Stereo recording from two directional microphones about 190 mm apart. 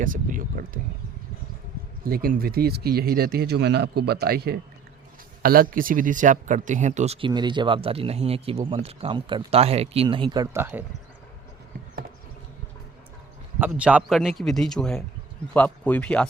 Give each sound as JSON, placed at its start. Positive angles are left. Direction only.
{"t": 0.0, "sound": "speech", "side_deg": -45}
{"t": 2.0, "sound": "speech", "side_deg": -50}
{"t": 13.6, "sound": "a man's voice", "side_deg": -5}